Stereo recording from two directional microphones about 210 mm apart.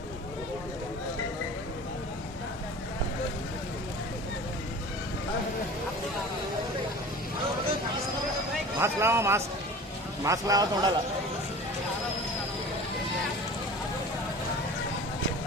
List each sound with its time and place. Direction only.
8.8 s speech: 10° right (ahead or behind)